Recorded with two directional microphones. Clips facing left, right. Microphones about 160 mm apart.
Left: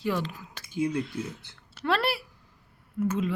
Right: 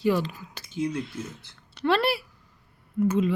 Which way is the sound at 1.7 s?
Centre (ahead or behind).